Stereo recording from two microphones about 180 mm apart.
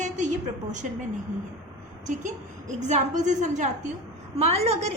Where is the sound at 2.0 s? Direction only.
45° right (ahead or behind).